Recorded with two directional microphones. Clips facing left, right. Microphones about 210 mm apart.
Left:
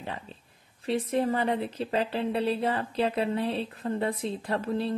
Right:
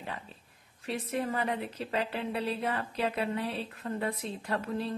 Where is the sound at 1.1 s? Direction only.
30° left (ahead or behind).